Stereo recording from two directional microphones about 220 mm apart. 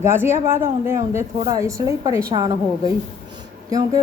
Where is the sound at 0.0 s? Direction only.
10° right (ahead or behind).